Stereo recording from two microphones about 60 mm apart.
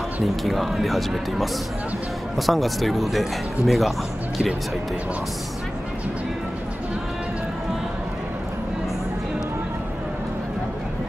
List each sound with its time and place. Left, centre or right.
0.2 s speech: centre